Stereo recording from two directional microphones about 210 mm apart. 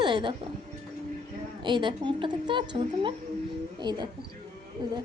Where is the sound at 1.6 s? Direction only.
20° right (ahead or behind).